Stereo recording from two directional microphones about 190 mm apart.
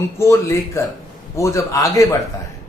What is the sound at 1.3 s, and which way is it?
Speech, 15° left (ahead or behind).